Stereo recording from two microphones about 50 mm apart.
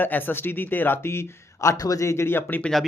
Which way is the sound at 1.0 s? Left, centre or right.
Left.